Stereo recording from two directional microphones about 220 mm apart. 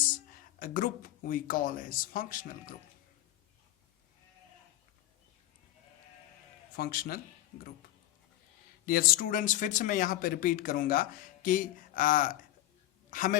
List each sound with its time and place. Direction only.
0.6 s speech: 40° left (ahead or behind)
6.7 s speech: 40° left (ahead or behind)
8.9 s speech: 40° left (ahead or behind)
13.1 s a sound: 35° left (ahead or behind)